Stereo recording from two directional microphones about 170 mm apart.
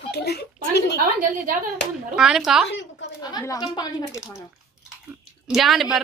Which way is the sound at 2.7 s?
90° left.